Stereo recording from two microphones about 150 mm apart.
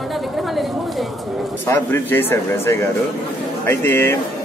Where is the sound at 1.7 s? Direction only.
15° left (ahead or behind).